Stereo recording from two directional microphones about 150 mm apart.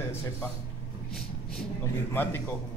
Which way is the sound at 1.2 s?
5° left (ahead or behind).